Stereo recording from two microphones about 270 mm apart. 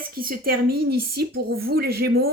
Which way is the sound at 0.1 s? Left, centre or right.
Right.